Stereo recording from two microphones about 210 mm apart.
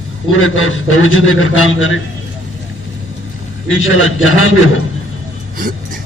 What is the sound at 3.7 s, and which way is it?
Speech, 70° left (ahead or behind).